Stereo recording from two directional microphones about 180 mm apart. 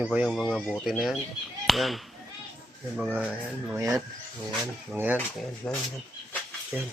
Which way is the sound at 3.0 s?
5° right (ahead or behind).